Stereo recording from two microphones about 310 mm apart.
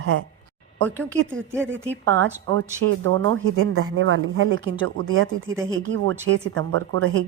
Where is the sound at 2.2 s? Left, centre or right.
Right.